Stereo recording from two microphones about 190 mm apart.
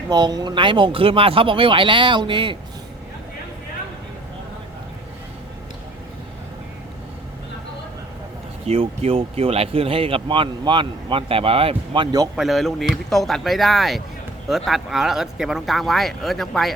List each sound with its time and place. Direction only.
0.1 s speech: 20° right (ahead or behind)
8.6 s speech: 35° right (ahead or behind)
12.4 s speech: centre (ahead or behind)